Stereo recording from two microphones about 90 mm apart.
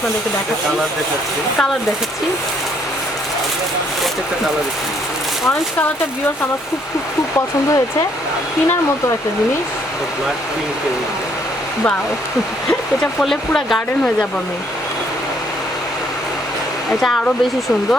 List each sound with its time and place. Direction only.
7.3 s speech: 40° left (ahead or behind)
13.1 s speech: 5° left (ahead or behind)
17.0 s speech: centre (ahead or behind)